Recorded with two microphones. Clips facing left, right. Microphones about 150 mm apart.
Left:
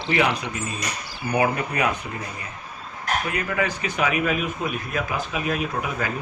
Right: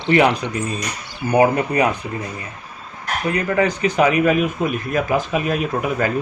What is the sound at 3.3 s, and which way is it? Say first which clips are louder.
Speech: right 12 dB; 35° right (ahead or behind).